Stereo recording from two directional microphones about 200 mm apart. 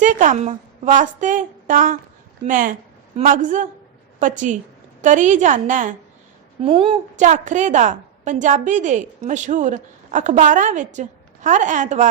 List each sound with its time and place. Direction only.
0.0 s a woman's voice: 40° right (ahead or behind)
6.6 s a woman's voice: 25° right (ahead or behind)